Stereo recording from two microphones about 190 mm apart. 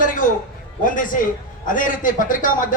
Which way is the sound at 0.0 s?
45° left (ahead or behind).